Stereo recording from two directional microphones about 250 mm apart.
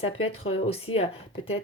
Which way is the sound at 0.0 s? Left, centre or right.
Left.